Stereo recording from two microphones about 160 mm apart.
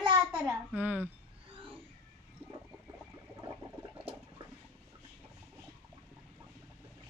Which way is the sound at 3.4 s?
15° right (ahead or behind).